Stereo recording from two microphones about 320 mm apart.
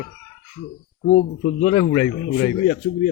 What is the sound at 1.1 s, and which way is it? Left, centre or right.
A man's voice, left.